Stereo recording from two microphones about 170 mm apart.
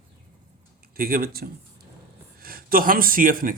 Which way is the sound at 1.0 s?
60° right (ahead or behind).